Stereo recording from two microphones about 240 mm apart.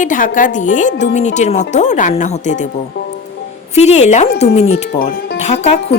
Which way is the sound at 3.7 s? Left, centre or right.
Left.